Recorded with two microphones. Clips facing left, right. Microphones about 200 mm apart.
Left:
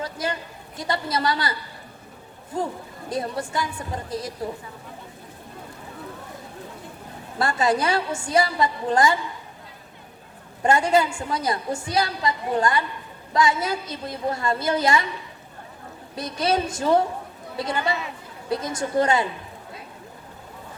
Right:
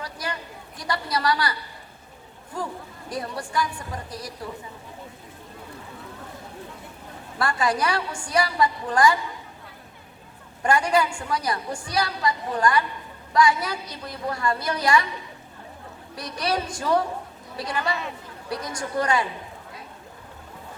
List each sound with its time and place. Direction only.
0.0 s a sound: 25° left (ahead or behind)
0.8 s a woman's voice: 25° left (ahead or behind)
3.1 s a woman's voice: 25° left (ahead or behind)
7.3 s a woman's voice: 25° left (ahead or behind)
10.6 s a woman's voice: 25° left (ahead or behind)
16.1 s a woman's voice: 25° left (ahead or behind)